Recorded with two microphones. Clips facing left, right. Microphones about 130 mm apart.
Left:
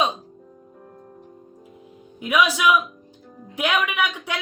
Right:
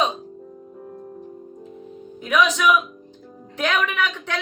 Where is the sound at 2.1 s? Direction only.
10° left (ahead or behind).